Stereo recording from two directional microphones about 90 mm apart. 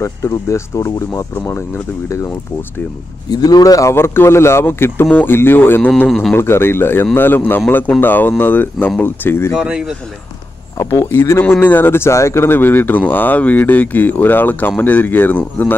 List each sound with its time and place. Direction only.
0.0 s speech: 35° left (ahead or behind)
3.3 s a man's voice: 45° left (ahead or behind)
3.9 s speech: 25° left (ahead or behind)
6.0 s a man's voice: centre (ahead or behind)
6.3 s speech: 25° left (ahead or behind)
9.6 s speech: 5° right (ahead or behind)
10.8 s speech: 35° left (ahead or behind)